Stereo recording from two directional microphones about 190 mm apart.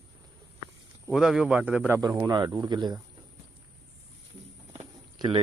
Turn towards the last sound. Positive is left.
turn(degrees=-30)  # may be behind; listen again after turning